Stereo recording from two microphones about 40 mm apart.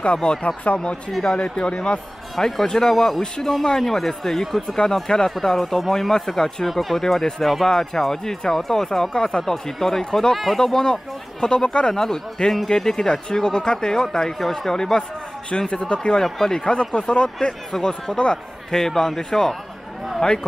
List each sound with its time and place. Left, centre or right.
0.0 s speech: left
2.3 s speech: centre
10.6 s speech: centre
11.9 s speech: centre
16.6 s speech: left
18.8 s speech: centre